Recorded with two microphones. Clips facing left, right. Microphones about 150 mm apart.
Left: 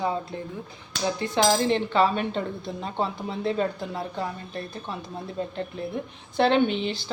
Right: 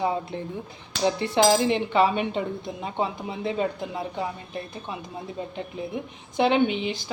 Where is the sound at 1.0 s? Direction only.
25° right (ahead or behind).